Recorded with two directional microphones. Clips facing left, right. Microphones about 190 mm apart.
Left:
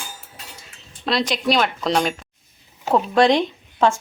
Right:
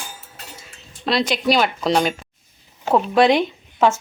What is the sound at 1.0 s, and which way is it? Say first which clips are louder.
Speech: right 2 dB; centre (ahead or behind).